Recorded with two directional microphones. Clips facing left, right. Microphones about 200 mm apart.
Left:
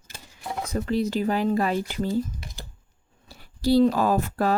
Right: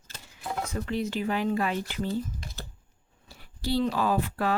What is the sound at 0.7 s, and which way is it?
Speech, 40° left (ahead or behind).